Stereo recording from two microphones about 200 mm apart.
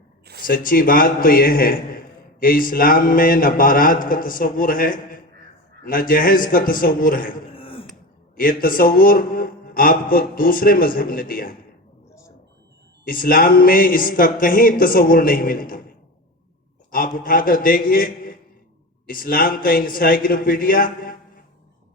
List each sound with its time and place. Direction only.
0.4 s a man's voice: 45° left (ahead or behind)
7.5 s throat clearing: 25° left (ahead or behind)
8.4 s a man's voice: 45° left (ahead or behind)
13.1 s a man's voice: 45° left (ahead or behind)
16.9 s a man's voice: 45° left (ahead or behind)